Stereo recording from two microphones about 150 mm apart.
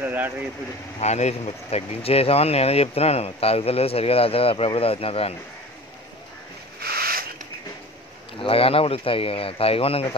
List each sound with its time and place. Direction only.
0.0 s speech: 10° right (ahead or behind)
0.9 s speech: 45° left (ahead or behind)
6.8 s rub: 90° right
8.4 s speech: 40° left (ahead or behind)